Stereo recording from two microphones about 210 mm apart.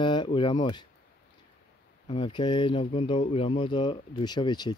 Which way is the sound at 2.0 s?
25° left (ahead or behind).